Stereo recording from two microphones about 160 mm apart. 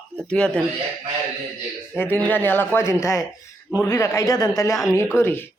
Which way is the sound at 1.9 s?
10° left (ahead or behind).